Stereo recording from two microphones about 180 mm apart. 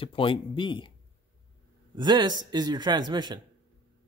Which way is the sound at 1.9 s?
25° right (ahead or behind).